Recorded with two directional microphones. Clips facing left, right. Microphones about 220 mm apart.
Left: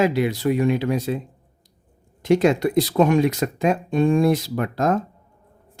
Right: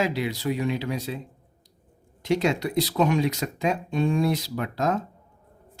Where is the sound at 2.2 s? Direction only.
50° left (ahead or behind).